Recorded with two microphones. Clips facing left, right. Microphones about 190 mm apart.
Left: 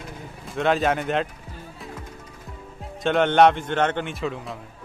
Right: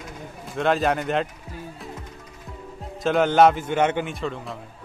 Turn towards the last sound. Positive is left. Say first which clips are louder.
# left 1 dB
turn(degrees=0)  # may be behind; listen again after turning